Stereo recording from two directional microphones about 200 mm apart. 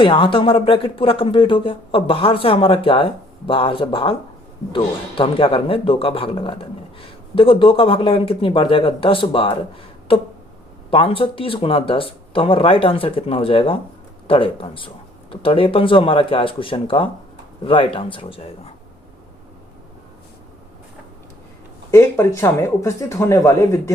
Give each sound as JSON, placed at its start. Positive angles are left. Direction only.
{"t": 0.0, "sound": "speech", "side_deg": 25}
{"t": 21.9, "sound": "speech", "side_deg": 10}